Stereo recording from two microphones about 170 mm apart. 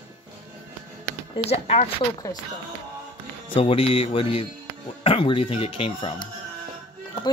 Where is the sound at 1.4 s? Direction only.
40° left (ahead or behind).